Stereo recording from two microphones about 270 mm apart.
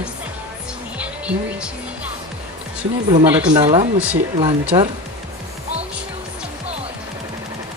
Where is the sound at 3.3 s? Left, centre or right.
Centre.